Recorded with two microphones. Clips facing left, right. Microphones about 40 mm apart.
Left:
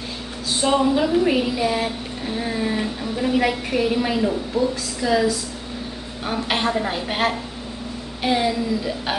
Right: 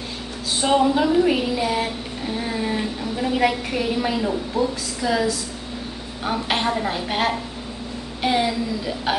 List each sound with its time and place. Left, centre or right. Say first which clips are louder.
0.6 s a woman's voice: even; centre
4.6 s a woman's voice: left 1 dB; centre
5.0 s a woman's voice: left 2 dB; centre
6.2 s a woman's voice: even; centre